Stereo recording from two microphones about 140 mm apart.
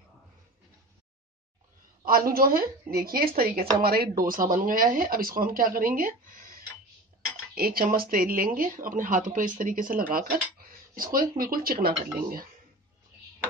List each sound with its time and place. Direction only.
2.0 s speech: 90° right